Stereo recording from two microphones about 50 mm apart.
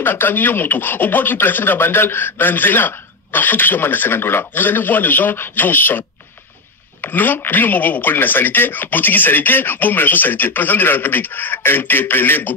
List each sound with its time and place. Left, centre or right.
0.0 s speech: left